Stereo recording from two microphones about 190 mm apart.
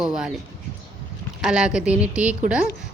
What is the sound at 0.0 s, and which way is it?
Speech, 5° right (ahead or behind).